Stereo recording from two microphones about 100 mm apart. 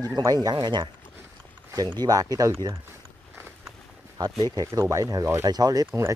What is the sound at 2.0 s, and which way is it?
Speech, 40° right (ahead or behind).